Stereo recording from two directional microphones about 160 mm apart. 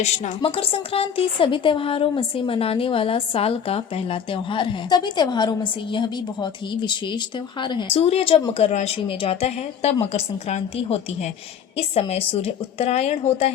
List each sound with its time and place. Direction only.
0.0 s a woman's voice: 45° left (ahead or behind)